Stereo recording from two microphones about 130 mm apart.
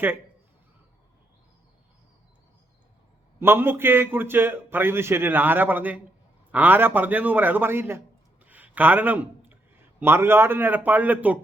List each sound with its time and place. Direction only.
3.4 s a man's voice: 15° right (ahead or behind)
8.4 s a sound: 10° right (ahead or behind)
10.0 s a man's voice: 20° right (ahead or behind)